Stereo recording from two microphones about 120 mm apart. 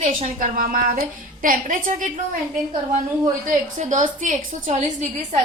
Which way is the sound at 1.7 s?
90° right.